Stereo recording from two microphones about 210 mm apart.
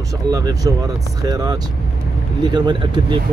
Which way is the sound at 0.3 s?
15° right (ahead or behind).